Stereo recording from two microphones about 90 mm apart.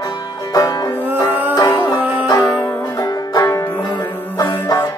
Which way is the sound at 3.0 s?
45° left (ahead or behind).